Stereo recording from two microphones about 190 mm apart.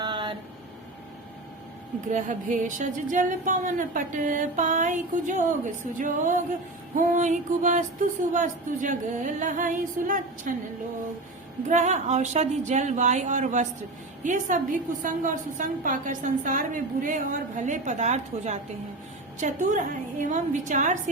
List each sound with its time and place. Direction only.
0.0 s a sound: 25° right (ahead or behind)
2.0 s speech: 40° right (ahead or behind)
11.7 s speech: 40° right (ahead or behind)